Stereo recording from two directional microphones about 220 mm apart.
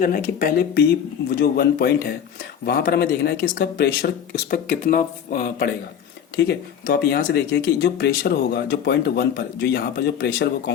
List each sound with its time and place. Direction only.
0.0 s speech: 40° left (ahead or behind)